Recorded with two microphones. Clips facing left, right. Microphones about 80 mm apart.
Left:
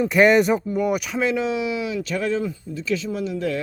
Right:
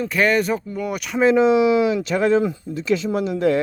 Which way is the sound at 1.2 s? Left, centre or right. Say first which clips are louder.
Right 11 dB; right.